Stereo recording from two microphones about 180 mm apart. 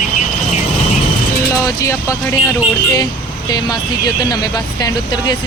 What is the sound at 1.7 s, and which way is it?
Speech, 15° left (ahead or behind).